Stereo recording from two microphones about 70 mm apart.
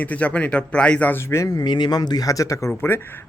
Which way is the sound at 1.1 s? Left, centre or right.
Left.